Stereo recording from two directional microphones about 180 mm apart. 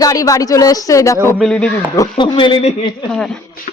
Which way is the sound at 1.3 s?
Centre (ahead or behind).